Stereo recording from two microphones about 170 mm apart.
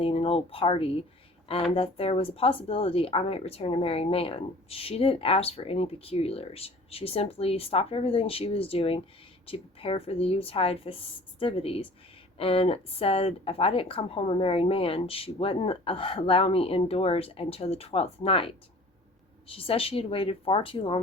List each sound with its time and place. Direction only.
0.0 s speech: 35° left (ahead or behind)